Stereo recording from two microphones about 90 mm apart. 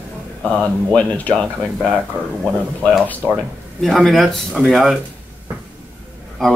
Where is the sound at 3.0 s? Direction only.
15° left (ahead or behind).